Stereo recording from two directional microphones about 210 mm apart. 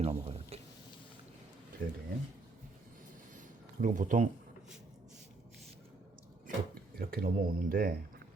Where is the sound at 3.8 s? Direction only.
35° right (ahead or behind).